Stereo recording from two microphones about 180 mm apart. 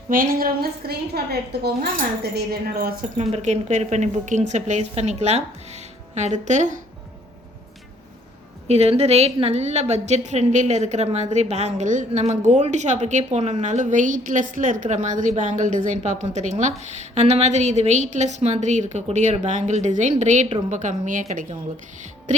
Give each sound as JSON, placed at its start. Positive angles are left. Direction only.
{"t": 0.1, "sound": "a woman's voice", "side_deg": -50}
{"t": 3.2, "sound": "a woman's voice", "side_deg": -40}
{"t": 8.6, "sound": "a woman's voice", "side_deg": -35}